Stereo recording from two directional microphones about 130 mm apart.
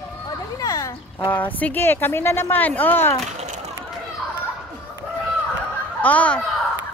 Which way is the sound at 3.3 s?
60° right (ahead or behind).